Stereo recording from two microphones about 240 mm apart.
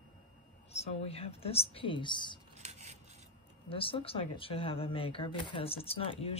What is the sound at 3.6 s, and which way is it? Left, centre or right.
Speech, left.